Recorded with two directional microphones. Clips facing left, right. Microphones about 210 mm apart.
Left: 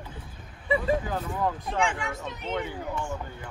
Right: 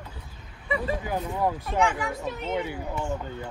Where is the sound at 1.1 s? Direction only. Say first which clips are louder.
Right 2 dB; 15° right (ahead or behind).